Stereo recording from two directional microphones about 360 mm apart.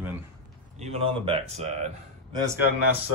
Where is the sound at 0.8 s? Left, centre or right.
Centre.